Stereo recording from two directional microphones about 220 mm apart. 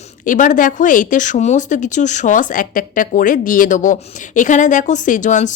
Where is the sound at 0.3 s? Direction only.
35° left (ahead or behind).